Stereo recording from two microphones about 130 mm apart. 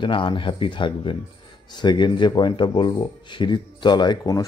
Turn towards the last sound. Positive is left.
turn(degrees=30)  # may be behind; listen again after turning